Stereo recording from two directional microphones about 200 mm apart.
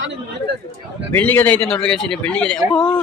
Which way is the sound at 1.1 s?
10° left (ahead or behind).